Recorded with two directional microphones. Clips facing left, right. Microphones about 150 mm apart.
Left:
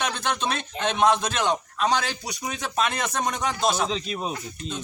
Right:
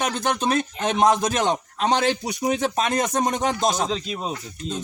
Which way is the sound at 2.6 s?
45° right (ahead or behind).